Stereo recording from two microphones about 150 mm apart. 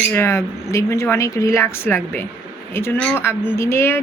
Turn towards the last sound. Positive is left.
turn(degrees=15)  # may be behind; listen again after turning